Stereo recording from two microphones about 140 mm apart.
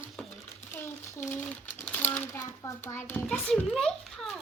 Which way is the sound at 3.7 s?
Centre (ahead or behind).